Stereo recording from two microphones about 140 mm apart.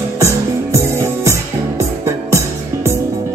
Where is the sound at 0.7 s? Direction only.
20° right (ahead or behind).